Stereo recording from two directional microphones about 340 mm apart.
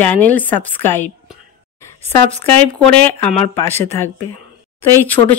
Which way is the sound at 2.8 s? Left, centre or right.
Centre.